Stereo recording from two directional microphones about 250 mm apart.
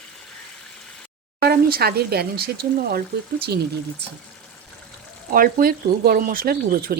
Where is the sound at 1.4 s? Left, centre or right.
Right.